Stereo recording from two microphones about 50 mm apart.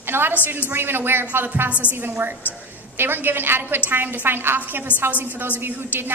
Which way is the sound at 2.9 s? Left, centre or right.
Right.